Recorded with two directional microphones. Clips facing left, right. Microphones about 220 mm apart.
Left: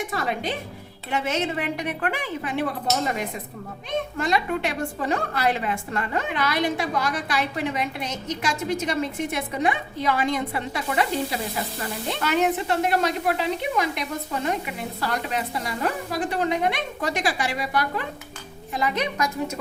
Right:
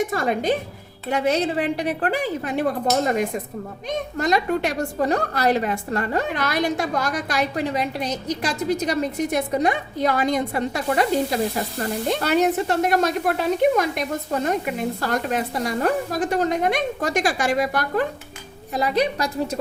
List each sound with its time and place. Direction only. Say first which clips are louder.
0.1 s a woman's voice: right 6 dB; 45° right (ahead or behind)
18.7 s a woman's voice: right 5 dB; 35° right (ahead or behind)